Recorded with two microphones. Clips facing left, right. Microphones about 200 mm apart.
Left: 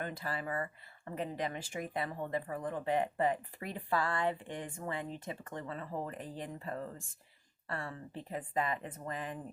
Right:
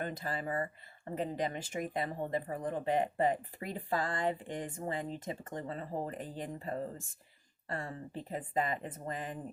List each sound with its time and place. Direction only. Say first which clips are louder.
0.0 s speech: right 2 dB; 35° right (ahead or behind)
2.3 s speech: right 1 dB; 25° right (ahead or behind)
2.8 s speech: right 1 dB; 40° right (ahead or behind)